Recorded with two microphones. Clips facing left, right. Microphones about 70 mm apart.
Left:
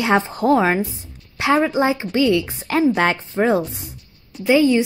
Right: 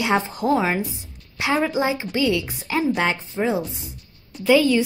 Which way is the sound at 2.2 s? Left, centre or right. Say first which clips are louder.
Left 5 dB; left.